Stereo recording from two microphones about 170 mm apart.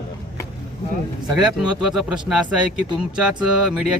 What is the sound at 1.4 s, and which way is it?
Speech, centre (ahead or behind).